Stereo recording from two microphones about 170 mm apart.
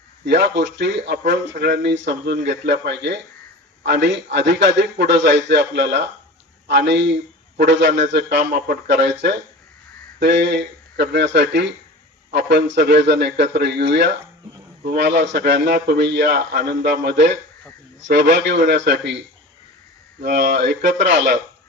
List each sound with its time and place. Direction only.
0.3 s a man's voice: 90° right
20.2 s a man's voice: 90° right